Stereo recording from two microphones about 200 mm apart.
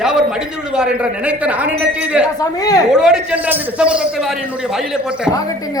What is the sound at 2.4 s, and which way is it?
Speech, 20° left (ahead or behind).